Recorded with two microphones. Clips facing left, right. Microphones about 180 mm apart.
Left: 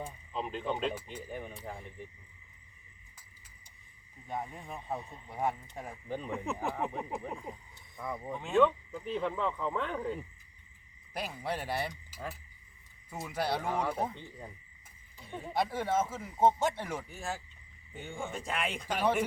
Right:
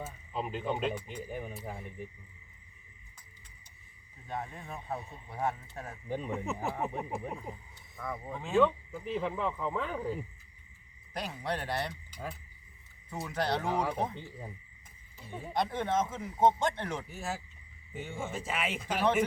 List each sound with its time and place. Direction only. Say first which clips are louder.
0.0 s speech: right 1 dB; 5° right (ahead or behind)
4.3 s speech: even; 15° left (ahead or behind)
4.9 s speech: even; 5° right (ahead or behind)
5.3 s speech: even; 15° left (ahead or behind)
6.1 s speech: right 1 dB; 5° right (ahead or behind)
7.9 s speech: even; 20° left (ahead or behind)
8.3 s speech: even; centre (ahead or behind)
11.1 s speech: right 1 dB; 5° left (ahead or behind)
14.1 s speech: right 2 dB; 5° right (ahead or behind)
17.1 s speech: right 1 dB; centre (ahead or behind)